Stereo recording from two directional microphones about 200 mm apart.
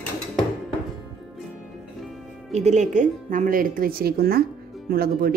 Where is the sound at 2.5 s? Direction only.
35° right (ahead or behind).